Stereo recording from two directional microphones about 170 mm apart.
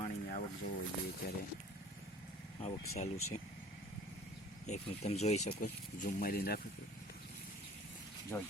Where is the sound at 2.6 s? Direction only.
40° left (ahead or behind).